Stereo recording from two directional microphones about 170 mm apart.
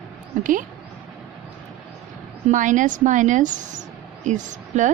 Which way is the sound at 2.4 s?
50° right (ahead or behind).